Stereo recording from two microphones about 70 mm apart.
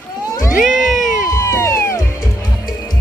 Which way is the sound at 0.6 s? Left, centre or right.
Centre.